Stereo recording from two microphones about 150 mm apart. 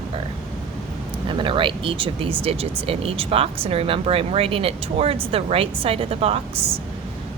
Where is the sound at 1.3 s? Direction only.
35° right (ahead or behind).